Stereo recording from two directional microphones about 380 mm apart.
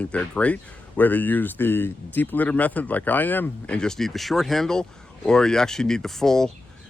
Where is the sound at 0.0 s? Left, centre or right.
Centre.